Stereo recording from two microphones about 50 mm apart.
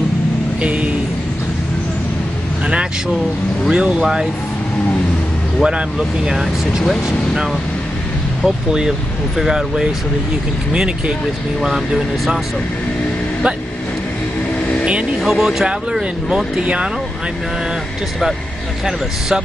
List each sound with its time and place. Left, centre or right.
0.6 s speech: right
3.7 s speech: centre
5.6 s speech: centre
8.5 s speech: centre
15.2 s speech: centre
16.6 s speech: right
18.9 s speech: centre